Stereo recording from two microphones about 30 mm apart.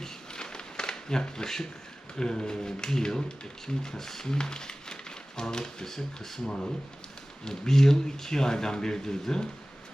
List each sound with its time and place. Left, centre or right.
0.3 s a sound: left
2.1 s speech: left
3.9 s speech: centre
4.3 s speech: left